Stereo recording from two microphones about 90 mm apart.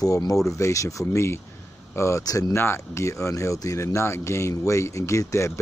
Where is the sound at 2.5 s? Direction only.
25° left (ahead or behind).